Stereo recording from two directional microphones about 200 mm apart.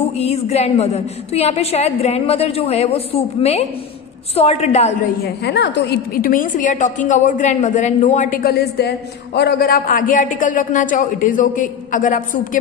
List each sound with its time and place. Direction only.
0.2 s a woman's voice: 30° left (ahead or behind)
5.2 s a woman's voice: 55° left (ahead or behind); by 12.2 s 40° left (ahead or behind)